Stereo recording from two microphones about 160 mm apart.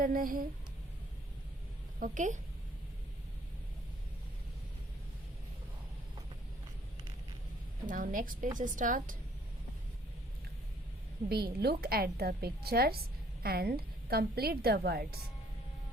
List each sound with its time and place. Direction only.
0.0 s a woman's voice: 60° right (ahead or behind)
2.0 s speech: 50° right (ahead or behind)
7.9 s a woman's voice: 55° right (ahead or behind)
11.3 s a woman's voice: 85° right